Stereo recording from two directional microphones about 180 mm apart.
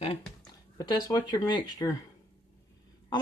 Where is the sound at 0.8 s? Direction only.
20° left (ahead or behind).